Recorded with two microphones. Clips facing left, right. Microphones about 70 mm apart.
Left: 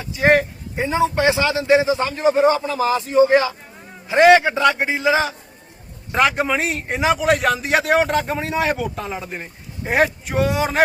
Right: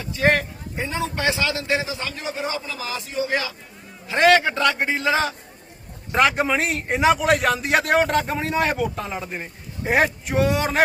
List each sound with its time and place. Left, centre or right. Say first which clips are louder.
0.0 s speech: left 4 dB; centre; by 3.5 s left
4.1 s a man's voice: left 5 dB; centre